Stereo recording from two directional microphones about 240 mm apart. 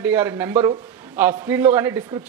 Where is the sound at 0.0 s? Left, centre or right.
Centre.